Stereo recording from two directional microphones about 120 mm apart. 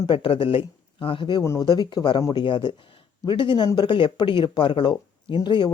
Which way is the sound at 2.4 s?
45° left (ahead or behind).